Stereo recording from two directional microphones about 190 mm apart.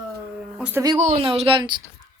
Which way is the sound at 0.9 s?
35° right (ahead or behind).